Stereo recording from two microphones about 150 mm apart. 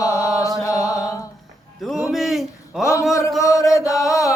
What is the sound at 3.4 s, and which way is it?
Chant, 20° left (ahead or behind).